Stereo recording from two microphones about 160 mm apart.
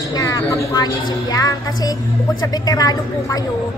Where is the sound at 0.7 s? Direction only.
20° left (ahead or behind).